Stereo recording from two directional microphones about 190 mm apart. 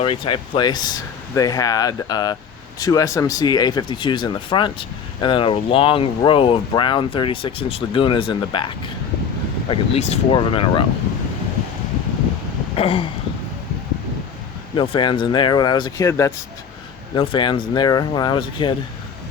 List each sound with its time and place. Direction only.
0.0 s speech: 30° left (ahead or behind)
12.7 s speech: 30° left (ahead or behind)
14.8 s speech: 25° left (ahead or behind)